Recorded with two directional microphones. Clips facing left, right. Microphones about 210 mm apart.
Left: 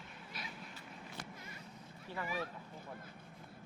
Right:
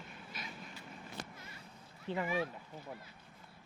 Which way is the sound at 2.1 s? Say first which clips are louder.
Right 6 dB; 20° right (ahead or behind).